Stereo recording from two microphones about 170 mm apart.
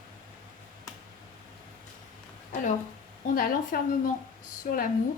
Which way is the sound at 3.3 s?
50° left (ahead or behind).